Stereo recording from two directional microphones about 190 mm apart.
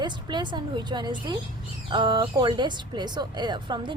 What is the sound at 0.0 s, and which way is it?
Speech, 25° right (ahead or behind).